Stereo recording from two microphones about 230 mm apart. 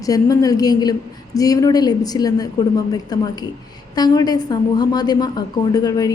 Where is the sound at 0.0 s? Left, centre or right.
Centre.